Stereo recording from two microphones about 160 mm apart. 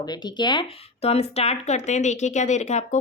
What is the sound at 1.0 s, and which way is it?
Speech, 40° left (ahead or behind).